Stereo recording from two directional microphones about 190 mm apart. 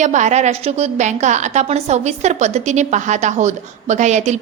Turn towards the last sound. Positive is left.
turn(degrees=-40)  # may be behind; listen again after turning